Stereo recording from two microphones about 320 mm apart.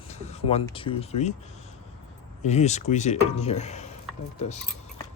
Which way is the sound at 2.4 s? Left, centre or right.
Left.